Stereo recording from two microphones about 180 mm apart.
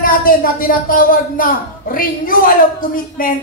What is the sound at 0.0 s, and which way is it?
Speech, 50° left (ahead or behind).